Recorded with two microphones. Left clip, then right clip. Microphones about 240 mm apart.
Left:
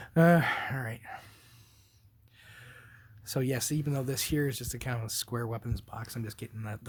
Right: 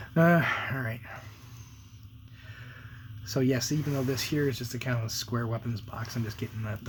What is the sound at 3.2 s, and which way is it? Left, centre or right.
Speech, left.